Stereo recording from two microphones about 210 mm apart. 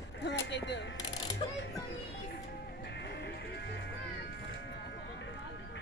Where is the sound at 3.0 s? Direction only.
55° left (ahead or behind).